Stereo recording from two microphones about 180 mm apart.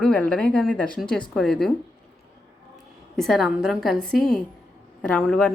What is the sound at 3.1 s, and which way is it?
A woman's voice, centre (ahead or behind).